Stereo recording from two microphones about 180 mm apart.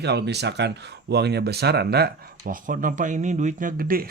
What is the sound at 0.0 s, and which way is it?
Speech, 70° right (ahead or behind).